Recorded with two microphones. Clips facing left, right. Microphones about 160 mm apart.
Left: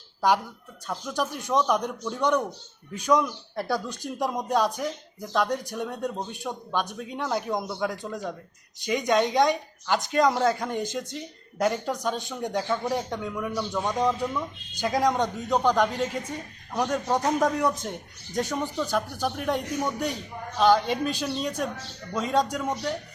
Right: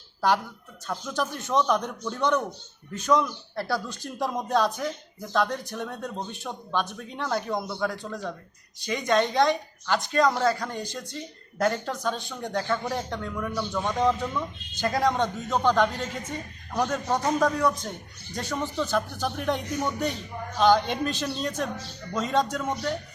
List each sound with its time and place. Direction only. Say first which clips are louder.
0.9 s a man's voice: even; 10° left (ahead or behind)